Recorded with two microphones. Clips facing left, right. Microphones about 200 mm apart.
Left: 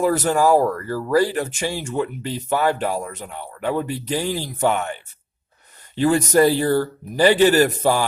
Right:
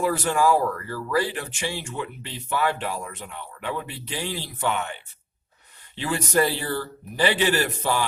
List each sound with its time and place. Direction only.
0.0 s speech: 40° left (ahead or behind)
6.0 s a man's voice: 45° left (ahead or behind)